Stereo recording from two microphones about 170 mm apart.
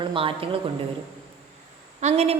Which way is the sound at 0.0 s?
30° right (ahead or behind).